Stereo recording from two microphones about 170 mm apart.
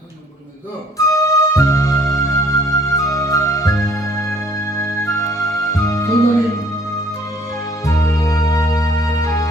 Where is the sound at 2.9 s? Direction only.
20° left (ahead or behind).